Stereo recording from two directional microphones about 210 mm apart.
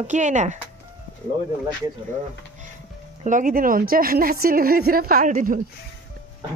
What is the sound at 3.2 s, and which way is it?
A woman's voice, 40° right (ahead or behind).